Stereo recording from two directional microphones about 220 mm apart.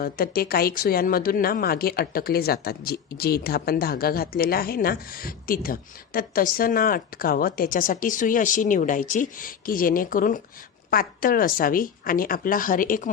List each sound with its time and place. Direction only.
0.0 s speech: 45° left (ahead or behind)